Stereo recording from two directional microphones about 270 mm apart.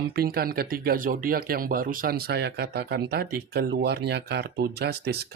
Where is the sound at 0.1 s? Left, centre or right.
Right.